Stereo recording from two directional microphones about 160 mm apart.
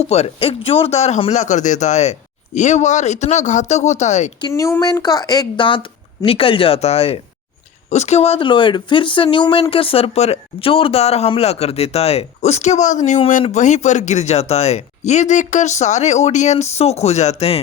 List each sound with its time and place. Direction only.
0.0 s speech: 40° left (ahead or behind)
4.4 s a woman's voice: 20° left (ahead or behind); by 17.6 s 40° left (ahead or behind)